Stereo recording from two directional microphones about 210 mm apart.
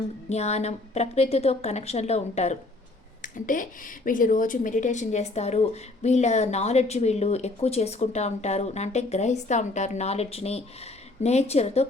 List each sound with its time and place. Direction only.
0.3 s a woman's voice: 30° left (ahead or behind)